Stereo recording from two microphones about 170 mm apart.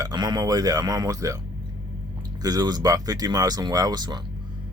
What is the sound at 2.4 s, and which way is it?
Speech, 20° right (ahead or behind).